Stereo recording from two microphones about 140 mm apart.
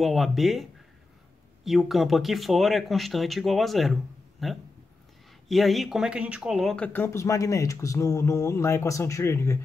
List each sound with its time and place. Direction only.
0.0 s speech: centre (ahead or behind); by 9.6 s 20° left (ahead or behind)